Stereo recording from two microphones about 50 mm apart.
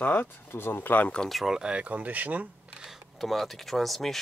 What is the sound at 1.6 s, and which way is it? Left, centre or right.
Speech, right.